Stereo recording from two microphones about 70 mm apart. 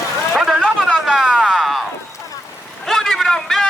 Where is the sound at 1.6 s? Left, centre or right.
Centre.